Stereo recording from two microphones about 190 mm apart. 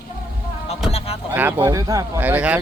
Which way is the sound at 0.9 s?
30° left (ahead or behind).